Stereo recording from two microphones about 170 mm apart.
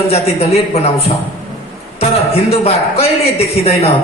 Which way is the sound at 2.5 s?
35° left (ahead or behind).